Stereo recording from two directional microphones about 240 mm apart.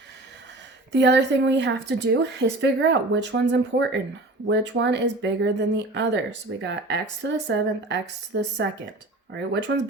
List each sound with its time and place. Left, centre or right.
0.9 s speech: right